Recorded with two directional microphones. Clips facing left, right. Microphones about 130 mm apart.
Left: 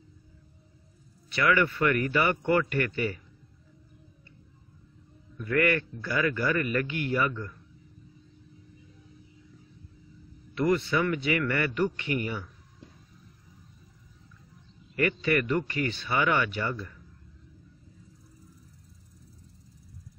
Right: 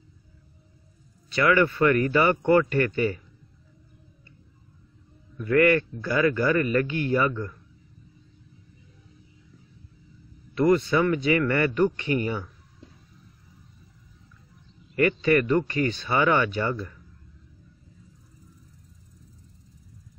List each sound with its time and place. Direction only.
1.3 s a man's voice: 35° right (ahead or behind)
5.5 s a man's voice: 35° right (ahead or behind)
10.6 s a man's voice: 40° right (ahead or behind)
15.0 s a man's voice: 35° right (ahead or behind)